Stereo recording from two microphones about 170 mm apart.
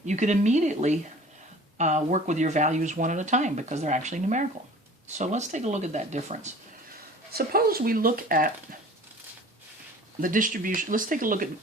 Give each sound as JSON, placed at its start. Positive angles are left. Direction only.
{"t": 0.0, "sound": "speech", "side_deg": -45}
{"t": 7.3, "sound": "speech", "side_deg": -60}
{"t": 10.2, "sound": "speech", "side_deg": -50}